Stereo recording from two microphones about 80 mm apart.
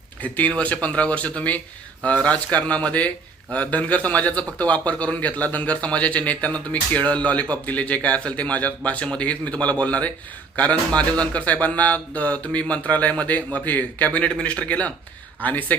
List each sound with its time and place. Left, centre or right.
0.2 s speech: centre